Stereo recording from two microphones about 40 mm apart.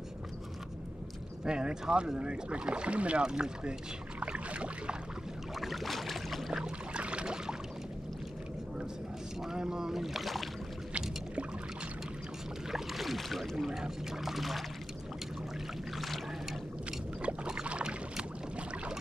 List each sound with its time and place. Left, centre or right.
1.4 s speech: right
4.2 s boat: right
5.6 s boat: centre
6.5 s a sound: centre
9.4 s speech: centre
10.9 s boat: right
12.7 s rowboat: centre
13.7 s speech: centre
16.0 s a sound: centre
17.6 s boat: right